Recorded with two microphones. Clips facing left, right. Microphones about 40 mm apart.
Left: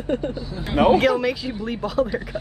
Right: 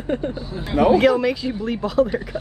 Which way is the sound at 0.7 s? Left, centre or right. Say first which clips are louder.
Right 1 dB; left.